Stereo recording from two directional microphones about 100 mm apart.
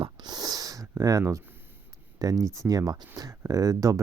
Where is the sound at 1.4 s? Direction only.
20° right (ahead or behind).